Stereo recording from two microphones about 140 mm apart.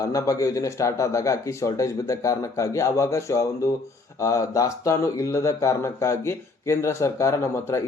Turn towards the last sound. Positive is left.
turn(degrees=20)  # may be behind; listen again after turning